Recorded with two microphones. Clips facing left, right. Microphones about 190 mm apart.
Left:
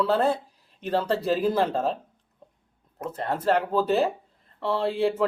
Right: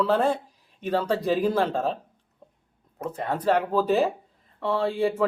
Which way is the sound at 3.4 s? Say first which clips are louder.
Right 1 dB; 10° right (ahead or behind).